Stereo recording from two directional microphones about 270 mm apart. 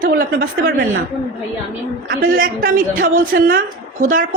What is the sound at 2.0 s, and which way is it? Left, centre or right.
Speech, right.